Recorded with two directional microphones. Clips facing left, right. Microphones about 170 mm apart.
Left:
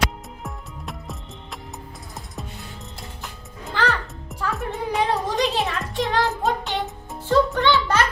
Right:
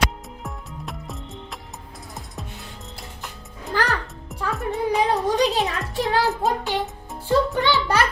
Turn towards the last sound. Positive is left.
turn(degrees=-5)  # may be behind; listen again after turning